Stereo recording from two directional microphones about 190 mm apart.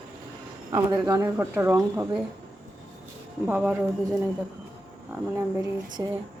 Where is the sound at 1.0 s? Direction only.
15° right (ahead or behind).